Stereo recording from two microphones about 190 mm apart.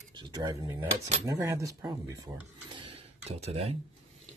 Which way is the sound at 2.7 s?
30° right (ahead or behind).